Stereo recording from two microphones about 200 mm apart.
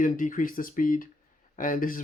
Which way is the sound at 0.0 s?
40° left (ahead or behind).